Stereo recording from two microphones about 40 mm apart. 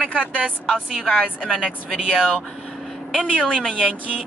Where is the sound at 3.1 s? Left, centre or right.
Left.